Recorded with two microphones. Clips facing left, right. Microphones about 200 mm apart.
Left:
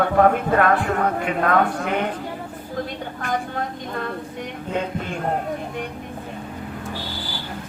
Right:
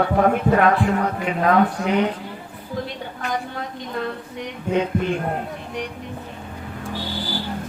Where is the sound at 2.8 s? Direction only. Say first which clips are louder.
Left 1 dB; 50° left (ahead or behind).